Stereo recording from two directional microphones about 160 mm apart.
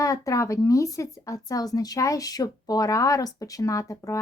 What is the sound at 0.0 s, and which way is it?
A woman's voice, 20° left (ahead or behind).